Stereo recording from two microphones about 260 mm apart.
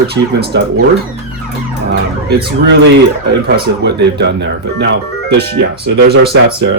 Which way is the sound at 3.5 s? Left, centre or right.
Right.